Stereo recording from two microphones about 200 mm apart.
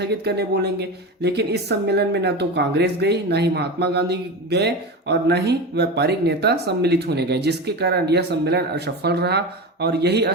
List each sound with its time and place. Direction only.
0.0 s speech: 55° right (ahead or behind)